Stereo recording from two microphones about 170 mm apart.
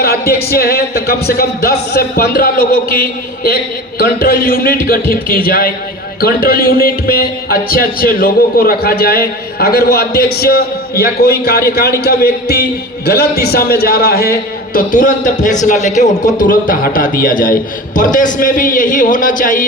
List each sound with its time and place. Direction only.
0.0 s a man's voice: 65° left (ahead or behind); by 19.6 s 50° left (ahead or behind)